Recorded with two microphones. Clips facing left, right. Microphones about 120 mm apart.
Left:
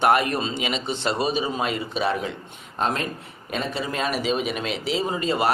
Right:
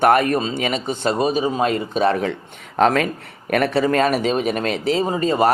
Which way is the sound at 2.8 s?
85° right.